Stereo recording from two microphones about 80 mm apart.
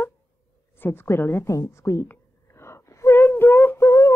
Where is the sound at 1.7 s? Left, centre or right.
Left.